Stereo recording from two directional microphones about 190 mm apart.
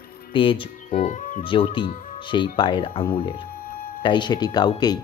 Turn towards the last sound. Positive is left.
turn(degrees=20)  # may be behind; listen again after turning